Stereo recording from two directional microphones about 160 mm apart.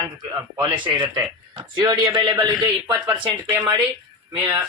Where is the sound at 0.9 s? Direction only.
20° right (ahead or behind).